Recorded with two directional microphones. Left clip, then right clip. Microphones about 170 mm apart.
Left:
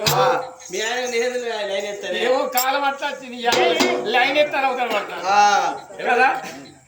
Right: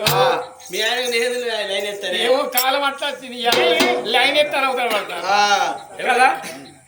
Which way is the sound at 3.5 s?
15° left (ahead or behind).